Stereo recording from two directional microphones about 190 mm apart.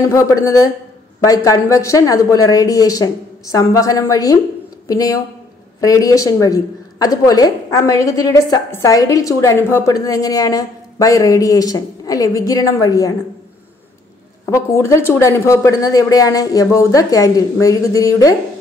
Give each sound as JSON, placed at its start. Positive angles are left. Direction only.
{"t": 0.1, "sound": "a woman's voice", "side_deg": 15}
{"t": 14.4, "sound": "a woman's voice", "side_deg": 15}